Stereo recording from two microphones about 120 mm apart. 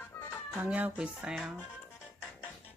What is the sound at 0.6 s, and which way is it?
Speech, 10° right (ahead or behind).